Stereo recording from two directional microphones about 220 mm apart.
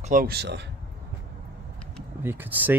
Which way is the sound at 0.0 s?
40° right (ahead or behind).